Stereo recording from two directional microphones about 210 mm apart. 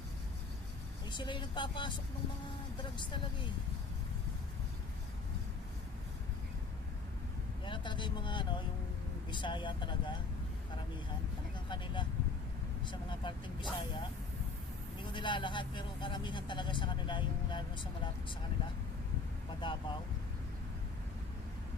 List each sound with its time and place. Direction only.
1.1 s speech: 20° left (ahead or behind)
7.6 s vehicle: 20° left (ahead or behind)
9.3 s speech: 20° left (ahead or behind)
11.7 s speech: 25° left (ahead or behind)
15.1 s speech: 20° left (ahead or behind)
19.6 s speech: 25° left (ahead or behind)